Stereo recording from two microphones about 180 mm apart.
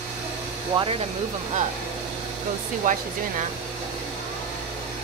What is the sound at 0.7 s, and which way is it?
Speech, 30° right (ahead or behind).